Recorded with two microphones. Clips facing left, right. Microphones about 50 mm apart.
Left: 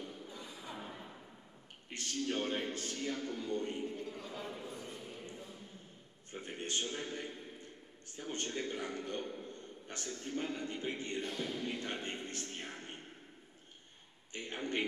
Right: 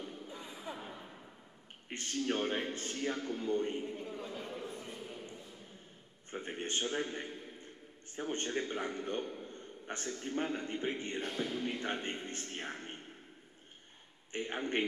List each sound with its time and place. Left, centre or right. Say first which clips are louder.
0.3 s music: right 3 dB; right
0.7 s a sound: even; centre
1.9 s a man's voice: right 3 dB; right
4.6 s a sound: right 2 dB; right
6.3 s speech: right 2 dB; right
9.2 s a man's voice: right 1 dB; centre
9.5 s a man's voice: right 3 dB; right
14.3 s a man's voice: right 3 dB; right